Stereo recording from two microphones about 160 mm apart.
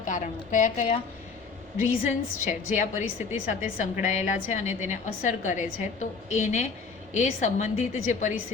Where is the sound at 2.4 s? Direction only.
55° left (ahead or behind).